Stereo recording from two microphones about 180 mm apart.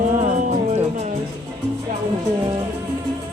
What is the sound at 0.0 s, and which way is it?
Music, 40° right (ahead or behind).